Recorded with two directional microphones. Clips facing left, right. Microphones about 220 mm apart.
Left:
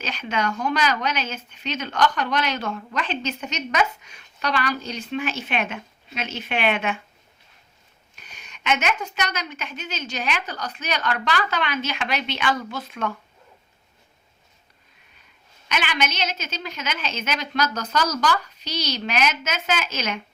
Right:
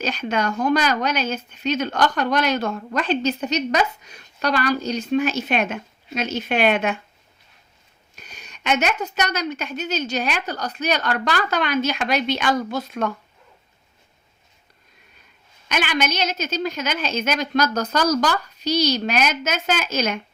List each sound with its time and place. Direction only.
0.0 s speech: 40° right (ahead or behind)
8.1 s speech: 40° right (ahead or behind)
15.7 s a woman's voice: 40° right (ahead or behind)